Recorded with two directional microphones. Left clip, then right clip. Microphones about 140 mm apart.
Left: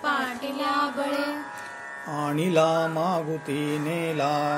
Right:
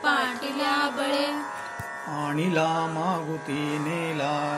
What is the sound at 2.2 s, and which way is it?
Mantra, 35° left (ahead or behind).